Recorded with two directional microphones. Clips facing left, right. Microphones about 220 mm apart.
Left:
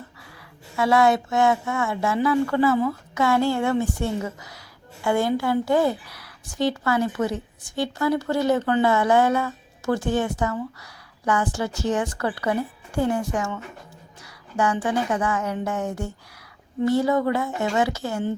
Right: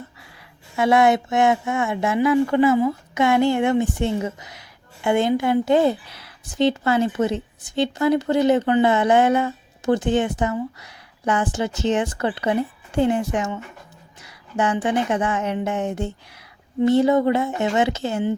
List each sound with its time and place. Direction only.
0.8 s a woman's voice: 20° right (ahead or behind)